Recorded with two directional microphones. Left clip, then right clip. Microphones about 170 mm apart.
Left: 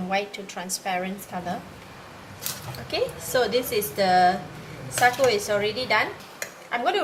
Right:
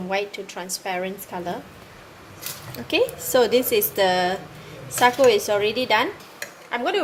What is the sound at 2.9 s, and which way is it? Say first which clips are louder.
A woman's voice: right 5 dB; 50° right (ahead or behind).